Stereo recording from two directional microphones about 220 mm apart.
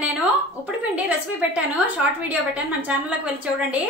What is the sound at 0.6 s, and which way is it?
A woman's voice, 5° right (ahead or behind).